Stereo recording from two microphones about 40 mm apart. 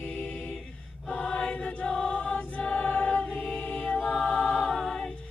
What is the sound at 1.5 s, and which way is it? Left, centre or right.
Chant, left.